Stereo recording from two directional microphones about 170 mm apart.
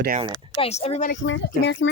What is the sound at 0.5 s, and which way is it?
Speech, 40° left (ahead or behind).